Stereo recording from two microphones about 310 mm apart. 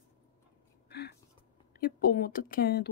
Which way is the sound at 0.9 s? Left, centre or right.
Left.